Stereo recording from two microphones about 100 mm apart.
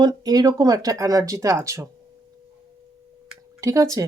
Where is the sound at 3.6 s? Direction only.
30° right (ahead or behind).